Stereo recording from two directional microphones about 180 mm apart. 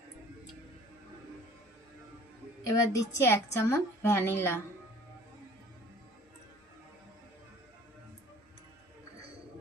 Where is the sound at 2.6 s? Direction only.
15° left (ahead or behind).